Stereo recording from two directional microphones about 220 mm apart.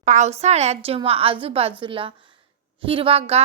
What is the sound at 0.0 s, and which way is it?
A woman's voice, 30° right (ahead or behind).